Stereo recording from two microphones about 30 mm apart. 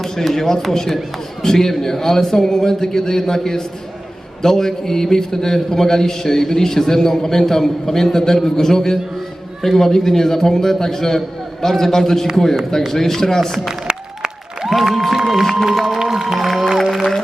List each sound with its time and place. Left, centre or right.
0.0 s speech: centre
0.3 s a man's voice: centre
13.8 s applause: right
14.7 s speech: centre
16.6 s music: centre